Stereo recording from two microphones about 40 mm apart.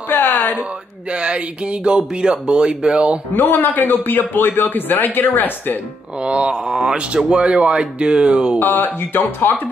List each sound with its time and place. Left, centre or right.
0.1 s a sound: left
1.1 s speech: right
3.3 s speech: left
3.8 s speech: left
6.2 s speech: right
8.5 s speech: left